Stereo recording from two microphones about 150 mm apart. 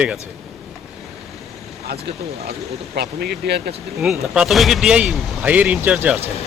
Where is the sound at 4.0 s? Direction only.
Centre (ahead or behind).